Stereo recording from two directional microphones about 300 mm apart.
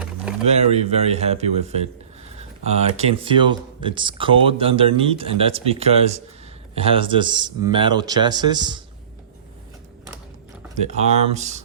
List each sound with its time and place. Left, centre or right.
0.4 s speech: right
10.8 s speech: right